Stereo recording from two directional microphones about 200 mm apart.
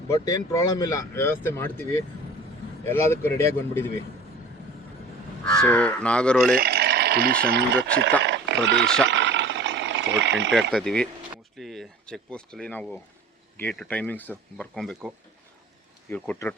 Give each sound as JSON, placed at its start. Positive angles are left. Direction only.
{"t": 0.1, "sound": "speech", "side_deg": 15}
{"t": 2.8, "sound": "speech", "side_deg": 10}
{"t": 5.5, "sound": "speech", "side_deg": 5}
{"t": 6.6, "sound": "speech", "side_deg": -55}
{"t": 8.2, "sound": "wild animals", "side_deg": -60}
{"t": 8.6, "sound": "speech", "side_deg": -60}
{"t": 9.0, "sound": "a sound", "side_deg": -65}
{"t": 10.7, "sound": "speech", "side_deg": 0}